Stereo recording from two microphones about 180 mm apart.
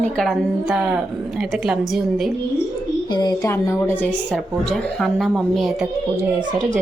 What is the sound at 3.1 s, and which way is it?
A woman's voice, 25° left (ahead or behind).